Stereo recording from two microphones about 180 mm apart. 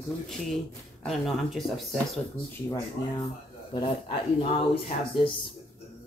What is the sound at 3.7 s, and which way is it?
Speech, 30° left (ahead or behind).